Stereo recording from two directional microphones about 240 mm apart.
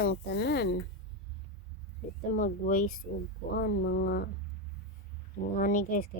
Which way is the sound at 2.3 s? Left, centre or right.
Left.